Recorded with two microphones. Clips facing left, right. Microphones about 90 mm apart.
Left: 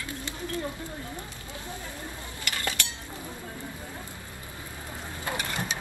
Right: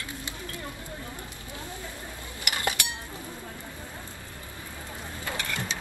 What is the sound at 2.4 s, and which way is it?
Chink, 20° right (ahead or behind).